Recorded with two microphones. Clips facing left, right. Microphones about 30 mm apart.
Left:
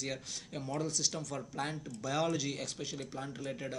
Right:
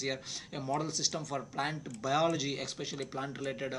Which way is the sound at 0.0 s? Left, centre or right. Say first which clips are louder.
Right 3 dB; centre.